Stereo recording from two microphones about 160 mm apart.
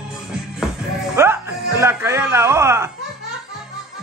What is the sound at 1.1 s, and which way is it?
Music, 15° right (ahead or behind).